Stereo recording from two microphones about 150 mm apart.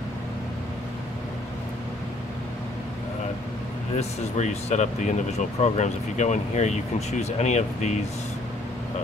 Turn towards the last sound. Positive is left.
turn(degrees=50)  # may be behind; listen again after turning